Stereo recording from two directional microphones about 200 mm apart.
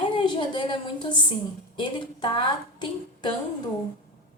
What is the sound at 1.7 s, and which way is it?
A woman's voice, 25° left (ahead or behind).